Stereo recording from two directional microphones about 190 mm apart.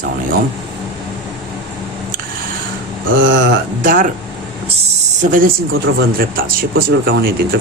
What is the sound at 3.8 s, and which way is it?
Speech, 45° right (ahead or behind).